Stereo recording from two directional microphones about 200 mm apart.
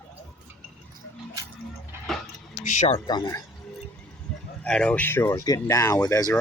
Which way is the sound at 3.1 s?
20° left (ahead or behind).